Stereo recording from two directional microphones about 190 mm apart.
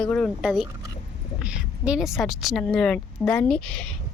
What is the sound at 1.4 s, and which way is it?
A woman's voice, 5° right (ahead or behind).